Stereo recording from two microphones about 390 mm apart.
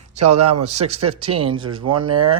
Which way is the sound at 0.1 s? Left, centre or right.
Centre.